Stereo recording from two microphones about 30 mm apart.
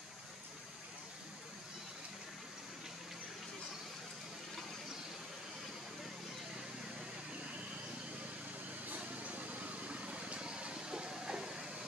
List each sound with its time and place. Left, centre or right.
9.2 s vehicle: right
10.8 s train: right